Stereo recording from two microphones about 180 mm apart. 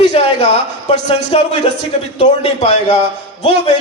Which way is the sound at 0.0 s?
35° left (ahead or behind).